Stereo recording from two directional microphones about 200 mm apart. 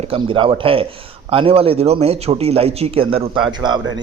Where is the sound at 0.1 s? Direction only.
25° right (ahead or behind).